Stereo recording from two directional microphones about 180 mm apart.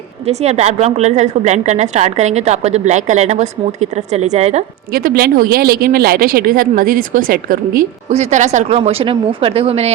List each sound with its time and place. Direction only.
0.3 s a woman's voice: 35° right (ahead or behind)
4.9 s speech: 55° right (ahead or behind)
8.1 s a woman's voice: 40° right (ahead or behind)